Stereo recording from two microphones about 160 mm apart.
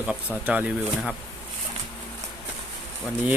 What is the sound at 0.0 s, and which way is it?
Speech, 5° right (ahead or behind).